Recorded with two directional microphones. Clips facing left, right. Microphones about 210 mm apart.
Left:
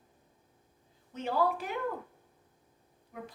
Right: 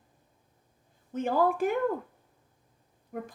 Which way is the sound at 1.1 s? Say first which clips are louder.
Right 4 dB; 50° right (ahead or behind).